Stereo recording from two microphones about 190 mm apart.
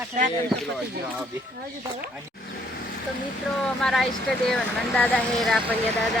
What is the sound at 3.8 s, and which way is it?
Speech, centre (ahead or behind).